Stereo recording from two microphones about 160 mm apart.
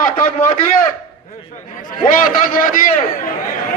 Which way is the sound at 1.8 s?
60° left (ahead or behind).